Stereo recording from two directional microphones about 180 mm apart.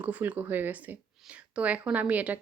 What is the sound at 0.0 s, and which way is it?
Speech, 10° right (ahead or behind).